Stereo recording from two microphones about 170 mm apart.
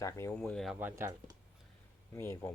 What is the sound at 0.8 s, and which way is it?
Speech, 15° right (ahead or behind).